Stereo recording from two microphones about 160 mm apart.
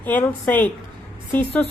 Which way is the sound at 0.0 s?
10° left (ahead or behind).